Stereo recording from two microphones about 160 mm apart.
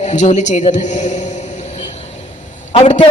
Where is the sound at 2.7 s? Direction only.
35° left (ahead or behind).